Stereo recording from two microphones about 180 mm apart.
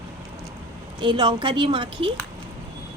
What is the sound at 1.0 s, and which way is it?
Speech, 25° right (ahead or behind).